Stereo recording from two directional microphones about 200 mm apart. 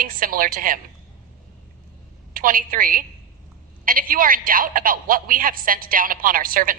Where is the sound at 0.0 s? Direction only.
45° right (ahead or behind).